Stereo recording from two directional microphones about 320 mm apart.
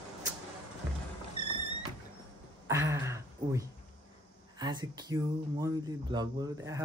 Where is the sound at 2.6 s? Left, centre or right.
Centre.